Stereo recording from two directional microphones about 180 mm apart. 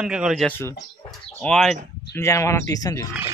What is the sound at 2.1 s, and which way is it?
Speech, 15° left (ahead or behind).